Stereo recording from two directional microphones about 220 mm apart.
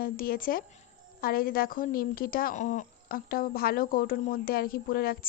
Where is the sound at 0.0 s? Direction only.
40° left (ahead or behind).